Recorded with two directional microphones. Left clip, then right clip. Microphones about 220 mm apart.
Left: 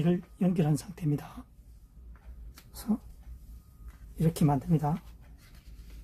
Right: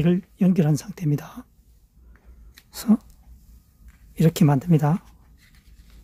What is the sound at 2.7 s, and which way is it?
Speech, 50° right (ahead or behind).